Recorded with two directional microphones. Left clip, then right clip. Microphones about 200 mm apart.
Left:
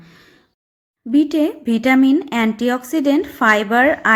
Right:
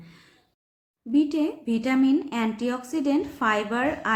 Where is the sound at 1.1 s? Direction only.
40° left (ahead or behind).